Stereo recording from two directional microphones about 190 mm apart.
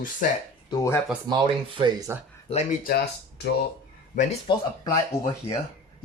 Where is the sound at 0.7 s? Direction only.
15° left (ahead or behind).